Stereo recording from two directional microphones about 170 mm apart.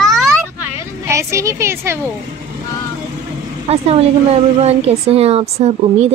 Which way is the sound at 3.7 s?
40° right (ahead or behind).